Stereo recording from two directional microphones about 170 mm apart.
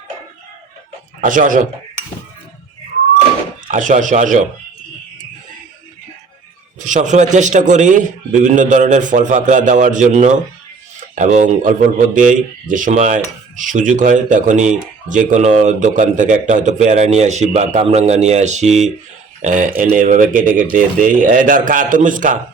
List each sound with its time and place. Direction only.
1.2 s speech: 50° right (ahead or behind)
3.7 s speech: 50° right (ahead or behind)
6.7 s speech: 45° right (ahead or behind)